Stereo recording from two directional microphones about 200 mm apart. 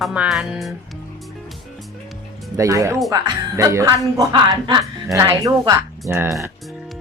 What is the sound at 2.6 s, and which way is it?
Speech, 15° right (ahead or behind).